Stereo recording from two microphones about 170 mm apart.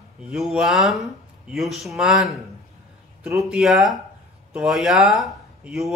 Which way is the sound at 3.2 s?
15° right (ahead or behind).